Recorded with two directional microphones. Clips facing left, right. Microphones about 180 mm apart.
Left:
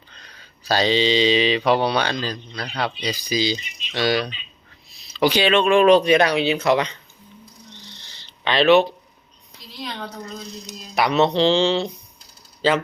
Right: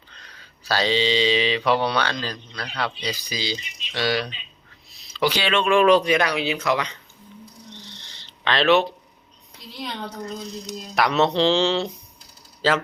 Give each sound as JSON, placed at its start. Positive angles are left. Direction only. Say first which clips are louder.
{"t": 0.1, "sound": "mantra", "louder": "left 1 dB", "side_deg": 15}
{"t": 2.0, "sound": "speech", "louder": "left 2 dB", "side_deg": 15}
{"t": 7.8, "sound": "a sound", "louder": "right 1 dB", "side_deg": 10}
{"t": 10.7, "sound": "speech", "louder": "left 1 dB", "side_deg": 0}